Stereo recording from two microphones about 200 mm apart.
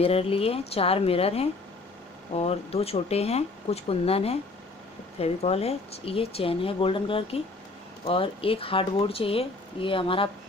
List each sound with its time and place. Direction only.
0.0 s speech: 30° left (ahead or behind)